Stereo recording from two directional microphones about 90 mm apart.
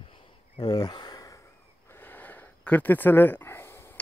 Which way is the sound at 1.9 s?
25° left (ahead or behind).